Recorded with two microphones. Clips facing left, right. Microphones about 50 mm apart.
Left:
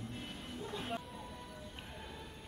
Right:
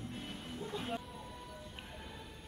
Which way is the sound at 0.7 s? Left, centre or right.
Centre.